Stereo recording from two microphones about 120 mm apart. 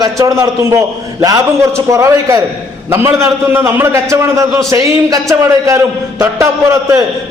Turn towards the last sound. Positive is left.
turn(degrees=-25)  # may be behind; listen again after turning